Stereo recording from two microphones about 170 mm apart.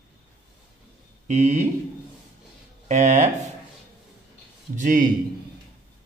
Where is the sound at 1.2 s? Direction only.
45° right (ahead or behind).